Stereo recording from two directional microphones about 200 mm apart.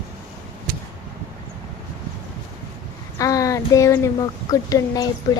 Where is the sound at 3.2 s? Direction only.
15° left (ahead or behind).